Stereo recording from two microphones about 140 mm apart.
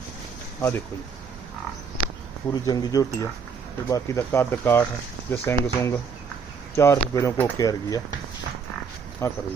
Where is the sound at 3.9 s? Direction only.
15° left (ahead or behind).